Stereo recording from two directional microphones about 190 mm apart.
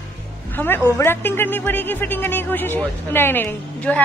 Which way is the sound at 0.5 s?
10° left (ahead or behind).